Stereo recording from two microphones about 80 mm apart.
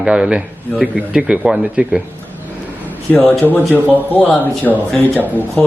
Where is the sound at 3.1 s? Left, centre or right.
Left.